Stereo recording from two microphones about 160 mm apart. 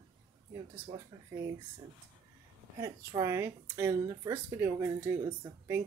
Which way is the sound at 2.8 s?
20° right (ahead or behind).